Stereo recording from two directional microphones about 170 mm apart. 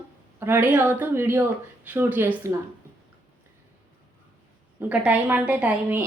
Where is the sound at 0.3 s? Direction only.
10° right (ahead or behind).